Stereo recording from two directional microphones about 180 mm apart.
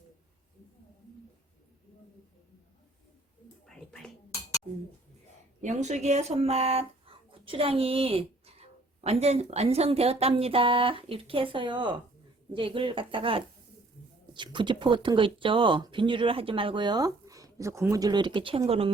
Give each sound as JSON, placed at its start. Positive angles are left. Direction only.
{"t": 3.7, "sound": "whispering", "side_deg": 5}
{"t": 5.6, "sound": "speech", "side_deg": -40}